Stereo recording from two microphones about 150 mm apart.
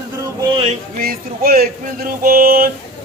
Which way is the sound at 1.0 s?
75° right (ahead or behind).